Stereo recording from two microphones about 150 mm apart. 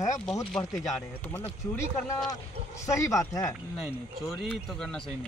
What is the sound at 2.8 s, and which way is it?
Speech, 20° left (ahead or behind).